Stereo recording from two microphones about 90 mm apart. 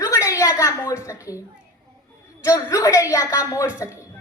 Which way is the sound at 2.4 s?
35° left (ahead or behind).